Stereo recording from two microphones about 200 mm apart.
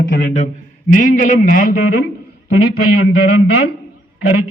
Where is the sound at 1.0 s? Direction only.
40° left (ahead or behind).